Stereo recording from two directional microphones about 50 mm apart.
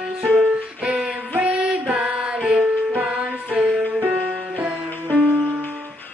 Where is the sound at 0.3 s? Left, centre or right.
Right.